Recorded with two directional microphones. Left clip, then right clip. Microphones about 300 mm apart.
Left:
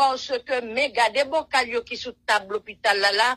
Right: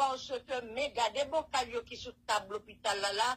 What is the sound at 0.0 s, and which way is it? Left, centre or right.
Speech, left.